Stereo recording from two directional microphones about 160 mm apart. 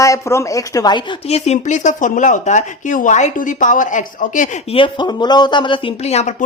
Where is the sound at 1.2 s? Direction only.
40° left (ahead or behind).